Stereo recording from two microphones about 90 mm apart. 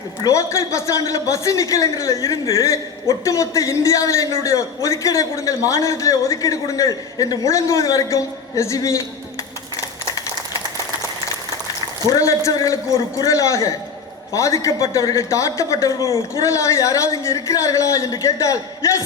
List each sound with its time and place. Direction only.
0.2 s a man's voice: 35° left (ahead or behind)
12.0 s a man's voice: 40° left (ahead or behind)